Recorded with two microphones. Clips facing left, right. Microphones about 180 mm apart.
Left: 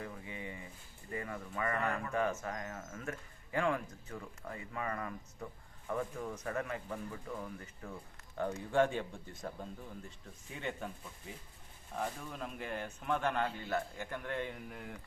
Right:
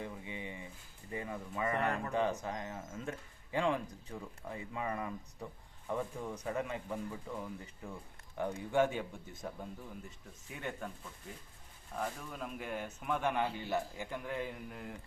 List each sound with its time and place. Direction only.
0.0 s a sound: 20° right (ahead or behind)
1.1 s speech: 20° right (ahead or behind)
10.5 s speech: 5° right (ahead or behind)